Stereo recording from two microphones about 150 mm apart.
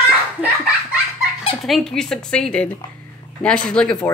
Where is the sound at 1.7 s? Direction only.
5° left (ahead or behind).